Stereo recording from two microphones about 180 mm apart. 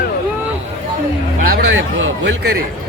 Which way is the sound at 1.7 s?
90° right.